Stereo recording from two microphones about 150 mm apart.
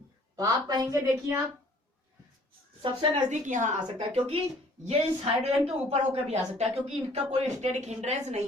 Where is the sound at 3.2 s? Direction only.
55° right (ahead or behind).